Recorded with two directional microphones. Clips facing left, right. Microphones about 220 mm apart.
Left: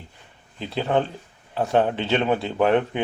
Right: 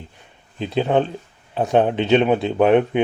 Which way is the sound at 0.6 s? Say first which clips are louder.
Right 4 dB; 20° right (ahead or behind).